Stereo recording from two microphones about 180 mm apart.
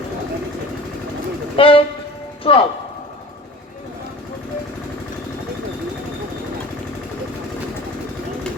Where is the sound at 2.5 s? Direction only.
30° left (ahead or behind).